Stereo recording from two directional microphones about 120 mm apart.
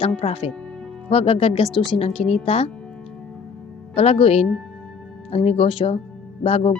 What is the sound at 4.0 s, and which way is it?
A woman's voice, 55° left (ahead or behind).